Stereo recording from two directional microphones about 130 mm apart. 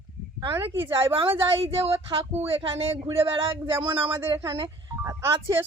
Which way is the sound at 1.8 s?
45° right (ahead or behind).